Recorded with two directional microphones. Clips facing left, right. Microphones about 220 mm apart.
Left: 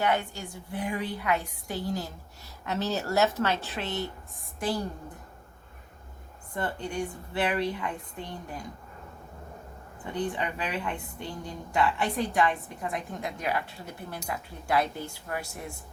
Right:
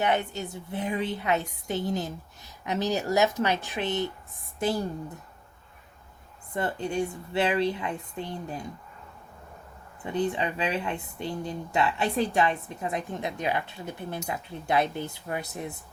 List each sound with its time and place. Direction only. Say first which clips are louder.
0.0 s a woman's voice: right 1 dB; 20° right (ahead or behind)
6.5 s speech: right 3 dB; 20° right (ahead or behind)
10.2 s speech: right 4 dB; 25° right (ahead or behind)